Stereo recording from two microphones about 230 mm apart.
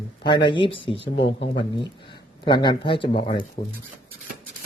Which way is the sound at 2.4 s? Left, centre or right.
Centre.